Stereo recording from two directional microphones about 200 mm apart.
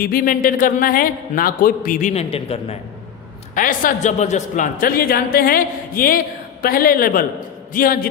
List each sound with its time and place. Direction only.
0.0 s a man's voice: 45° left (ahead or behind); by 2.7 s 30° left (ahead or behind)
3.5 s a man's voice: 45° left (ahead or behind)